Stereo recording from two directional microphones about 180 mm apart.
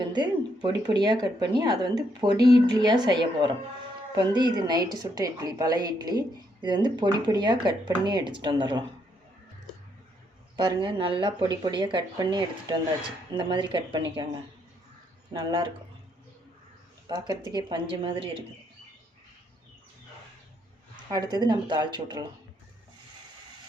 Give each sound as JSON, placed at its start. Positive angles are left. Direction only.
{"t": 0.0, "sound": "a woman's voice", "side_deg": -25}
{"t": 10.6, "sound": "a woman's voice", "side_deg": -25}
{"t": 15.3, "sound": "a woman's voice", "side_deg": -25}
{"t": 17.1, "sound": "a woman's voice", "side_deg": -25}
{"t": 20.9, "sound": "a woman's voice", "side_deg": -20}